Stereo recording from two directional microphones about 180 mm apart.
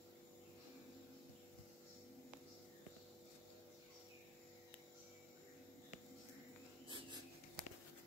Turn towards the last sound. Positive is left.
turn(degrees=-25)  # may be behind; listen again after turning